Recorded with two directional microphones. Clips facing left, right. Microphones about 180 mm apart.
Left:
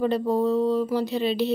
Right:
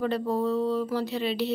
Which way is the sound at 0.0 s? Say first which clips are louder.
Left 4 dB; 20° left (ahead or behind).